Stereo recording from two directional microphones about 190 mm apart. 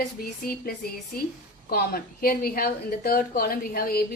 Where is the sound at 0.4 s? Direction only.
50° left (ahead or behind).